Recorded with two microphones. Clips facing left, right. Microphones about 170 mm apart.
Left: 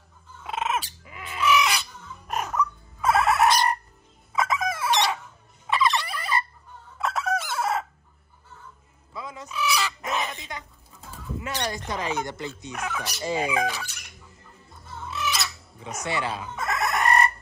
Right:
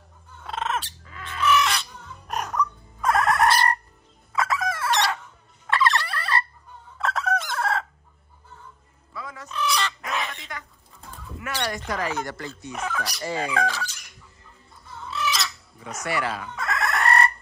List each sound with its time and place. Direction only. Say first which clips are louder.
0.4 s bird: left 1 dB; 5° left (ahead or behind)
4.3 s crowing: even; 20° left (ahead or behind)
5.7 s turkey: right 1 dB; 15° left (ahead or behind)
7.0 s chicken: right 1 dB; 10° left (ahead or behind)
9.1 s music: left 1 dB; 20° left (ahead or behind)
9.5 s fowl: right 1 dB; 5° left (ahead or behind)
10.0 s chicken: left 1 dB; 20° left (ahead or behind)
11.3 s a sound: right 1 dB; 25° left (ahead or behind)
12.7 s speech: right 3 dB; centre (ahead or behind)
13.0 s speech: left 1 dB; 20° left (ahead or behind)
15.0 s chicken: right 2 dB; 20° left (ahead or behind)